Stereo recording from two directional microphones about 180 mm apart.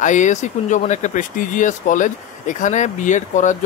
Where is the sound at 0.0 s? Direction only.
45° left (ahead or behind).